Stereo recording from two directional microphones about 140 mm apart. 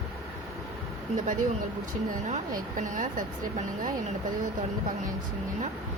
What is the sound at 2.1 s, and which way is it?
Speech, 60° right (ahead or behind).